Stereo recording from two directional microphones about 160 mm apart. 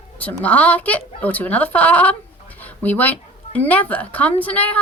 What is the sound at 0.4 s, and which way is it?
A woman's voice, 10° left (ahead or behind).